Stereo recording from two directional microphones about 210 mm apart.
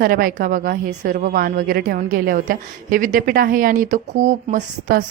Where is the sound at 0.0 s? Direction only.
45° right (ahead or behind).